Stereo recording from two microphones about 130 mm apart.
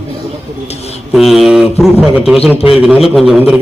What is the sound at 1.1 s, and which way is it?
Speech, centre (ahead or behind).